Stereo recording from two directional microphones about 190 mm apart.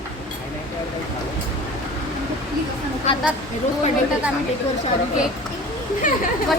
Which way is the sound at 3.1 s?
35° left (ahead or behind).